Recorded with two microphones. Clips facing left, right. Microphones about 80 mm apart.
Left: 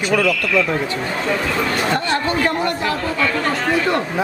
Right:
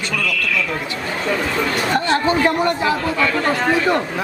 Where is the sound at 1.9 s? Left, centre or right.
Centre.